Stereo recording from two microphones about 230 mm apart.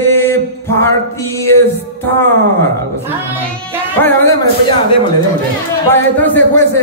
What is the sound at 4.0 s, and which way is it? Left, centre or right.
Music, centre.